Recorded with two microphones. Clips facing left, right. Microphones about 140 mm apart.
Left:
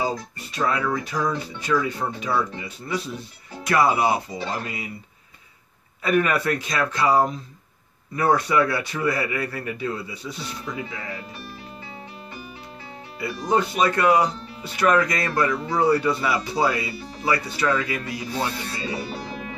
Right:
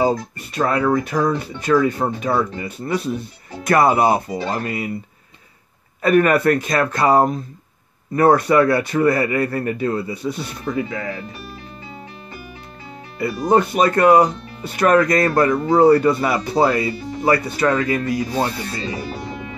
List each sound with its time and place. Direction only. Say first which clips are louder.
0.0 s speech: right 8 dB; 55° right (ahead or behind)
6.0 s speech: right 7 dB; 50° right (ahead or behind)
13.2 s speech: right 6 dB; 50° right (ahead or behind)